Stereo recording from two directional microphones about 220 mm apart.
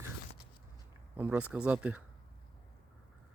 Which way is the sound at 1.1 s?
10° right (ahead or behind).